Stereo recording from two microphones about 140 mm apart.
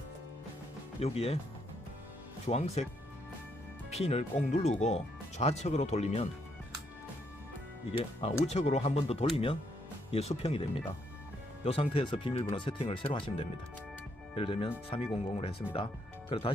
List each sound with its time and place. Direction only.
1.0 s speech: 45° left (ahead or behind)
2.5 s speech: 50° left (ahead or behind)
3.9 s speech: 50° left (ahead or behind)
8.2 s speech: 50° left (ahead or behind)